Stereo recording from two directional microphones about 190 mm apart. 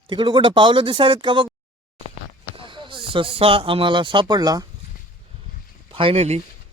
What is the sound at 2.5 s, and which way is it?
Speech, 25° right (ahead or behind).